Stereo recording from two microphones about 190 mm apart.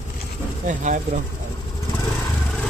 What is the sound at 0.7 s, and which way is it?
Speech, 40° right (ahead or behind).